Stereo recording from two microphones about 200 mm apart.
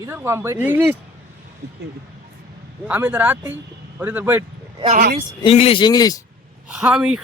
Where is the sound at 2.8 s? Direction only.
10° right (ahead or behind).